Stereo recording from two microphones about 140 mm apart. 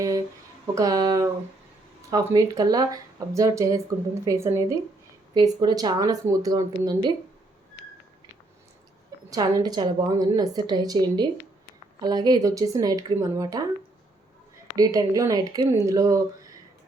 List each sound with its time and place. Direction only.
0.8 s speech: 25° right (ahead or behind)
5.3 s speech: 30° right (ahead or behind)
9.3 s speech: 25° right (ahead or behind)
14.8 s speech: 25° right (ahead or behind)